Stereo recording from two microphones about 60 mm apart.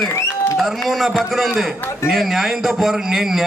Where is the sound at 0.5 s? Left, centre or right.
Centre.